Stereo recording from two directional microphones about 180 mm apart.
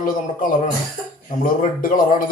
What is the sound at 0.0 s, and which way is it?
A man's voice, 50° left (ahead or behind).